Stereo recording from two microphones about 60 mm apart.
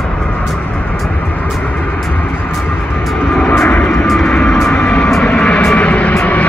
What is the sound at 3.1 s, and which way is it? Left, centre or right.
Vehicle, centre.